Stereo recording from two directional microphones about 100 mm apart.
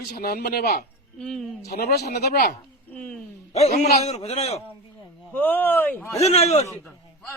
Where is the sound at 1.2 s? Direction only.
5° left (ahead or behind).